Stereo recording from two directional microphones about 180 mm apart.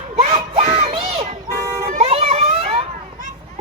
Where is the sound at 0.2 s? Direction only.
35° right (ahead or behind).